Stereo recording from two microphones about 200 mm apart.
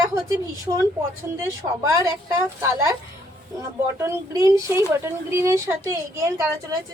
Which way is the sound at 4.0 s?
15° right (ahead or behind).